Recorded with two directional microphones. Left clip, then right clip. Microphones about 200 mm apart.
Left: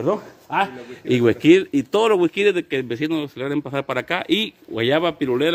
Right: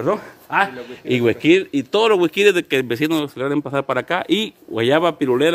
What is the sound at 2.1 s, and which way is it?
Speech, 5° left (ahead or behind).